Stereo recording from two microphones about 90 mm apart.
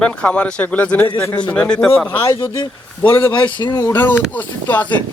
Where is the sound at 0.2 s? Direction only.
15° left (ahead or behind).